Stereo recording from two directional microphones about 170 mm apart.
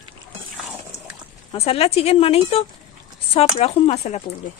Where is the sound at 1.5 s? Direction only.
35° left (ahead or behind).